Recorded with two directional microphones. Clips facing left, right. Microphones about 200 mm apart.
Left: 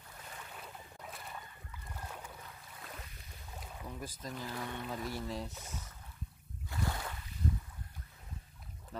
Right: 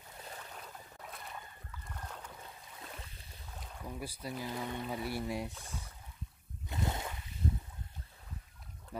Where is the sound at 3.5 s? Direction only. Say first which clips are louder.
Left 1 dB; 5° left (ahead or behind).